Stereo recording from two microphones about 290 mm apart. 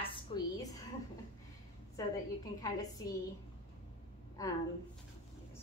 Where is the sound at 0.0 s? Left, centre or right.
Centre.